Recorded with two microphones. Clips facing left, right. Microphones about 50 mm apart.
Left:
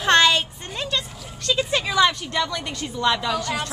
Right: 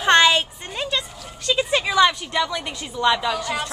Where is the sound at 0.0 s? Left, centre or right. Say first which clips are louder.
Right 2 dB; centre.